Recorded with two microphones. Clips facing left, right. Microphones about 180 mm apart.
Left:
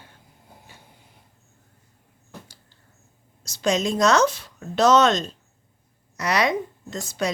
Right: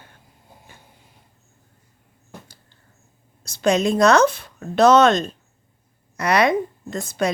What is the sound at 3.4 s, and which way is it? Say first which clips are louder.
A woman's voice: right 4 dB; 55° right (ahead or behind).